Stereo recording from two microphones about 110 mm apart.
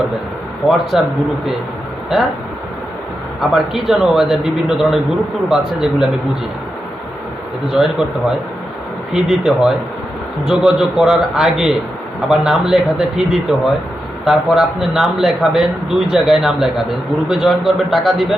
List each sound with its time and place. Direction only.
0.7 s speech: centre (ahead or behind)
3.5 s speech: 5° right (ahead or behind)
7.7 s speech: 5° right (ahead or behind)
9.1 s speech: 5° right (ahead or behind)